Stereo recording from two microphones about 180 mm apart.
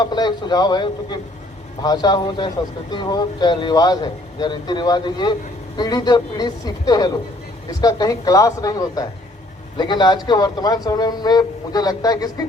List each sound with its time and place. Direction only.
0.0 s speech: 25° left (ahead or behind)